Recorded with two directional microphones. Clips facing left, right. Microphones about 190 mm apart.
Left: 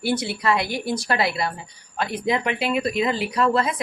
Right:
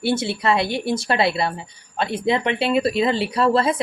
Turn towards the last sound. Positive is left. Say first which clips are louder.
# right 3 dB
turn(degrees=-30)  # may be behind; listen again after turning